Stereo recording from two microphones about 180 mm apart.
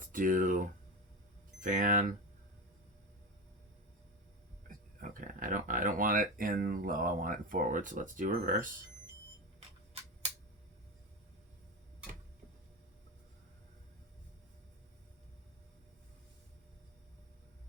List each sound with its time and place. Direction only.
0.0 s speech: 50° right (ahead or behind)
1.6 s speech: 50° right (ahead or behind)
4.9 s speech: 50° right (ahead or behind)